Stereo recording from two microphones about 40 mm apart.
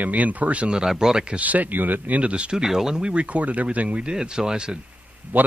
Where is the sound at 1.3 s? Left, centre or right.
Right.